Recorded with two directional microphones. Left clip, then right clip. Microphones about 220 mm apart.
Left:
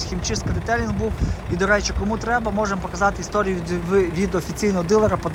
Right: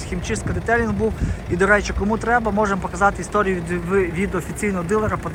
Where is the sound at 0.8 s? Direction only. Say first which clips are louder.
Right 3 dB; centre (ahead or behind).